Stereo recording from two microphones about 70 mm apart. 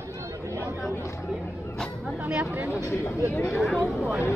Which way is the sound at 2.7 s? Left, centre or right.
Left.